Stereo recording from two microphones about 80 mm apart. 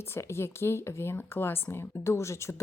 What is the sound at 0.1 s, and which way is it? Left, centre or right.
Speech, left.